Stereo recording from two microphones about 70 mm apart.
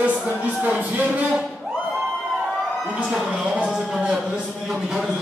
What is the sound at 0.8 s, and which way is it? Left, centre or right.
Music, right.